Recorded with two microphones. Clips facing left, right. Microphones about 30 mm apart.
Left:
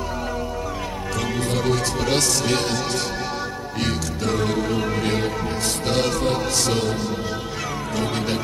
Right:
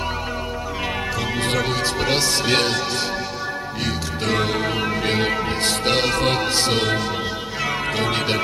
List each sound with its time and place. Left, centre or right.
1.8 s speech: right
2.5 s music: right
4.3 s music: right
5.2 s music: right
6.1 s music: right
7.9 s music: right